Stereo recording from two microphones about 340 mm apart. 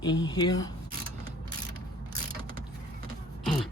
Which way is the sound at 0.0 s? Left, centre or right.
Centre.